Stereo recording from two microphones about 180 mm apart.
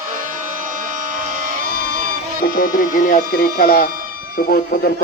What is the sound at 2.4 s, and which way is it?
Speech, 50° left (ahead or behind).